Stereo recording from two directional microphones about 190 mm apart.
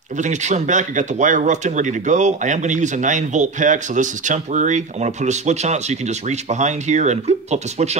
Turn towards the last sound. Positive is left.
turn(degrees=-35)  # may be behind; listen again after turning